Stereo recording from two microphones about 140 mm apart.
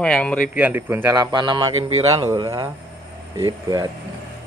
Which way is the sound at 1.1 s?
30° right (ahead or behind).